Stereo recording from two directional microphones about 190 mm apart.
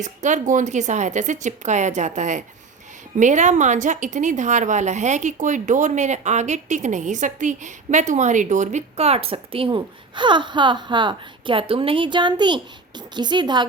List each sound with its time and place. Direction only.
0.0 s a woman's voice: 40° right (ahead or behind); by 13.7 s 25° right (ahead or behind)